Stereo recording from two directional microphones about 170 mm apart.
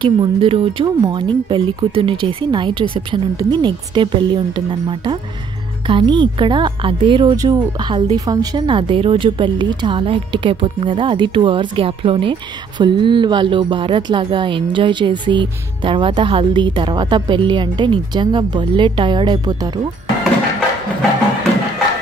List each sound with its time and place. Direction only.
0.0 s a woman's voice: 30° right (ahead or behind)